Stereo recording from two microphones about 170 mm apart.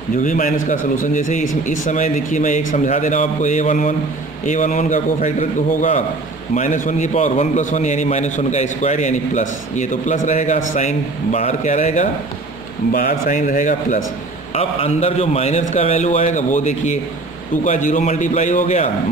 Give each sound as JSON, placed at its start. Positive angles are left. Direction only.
{"t": 0.2, "sound": "a man's voice", "side_deg": 50}
{"t": 14.5, "sound": "a man's voice", "side_deg": 35}